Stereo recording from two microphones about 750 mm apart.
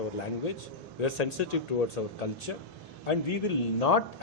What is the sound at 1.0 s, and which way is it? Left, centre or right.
A man's voice, left.